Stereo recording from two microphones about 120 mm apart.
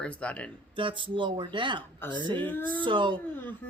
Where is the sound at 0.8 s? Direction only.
45° right (ahead or behind).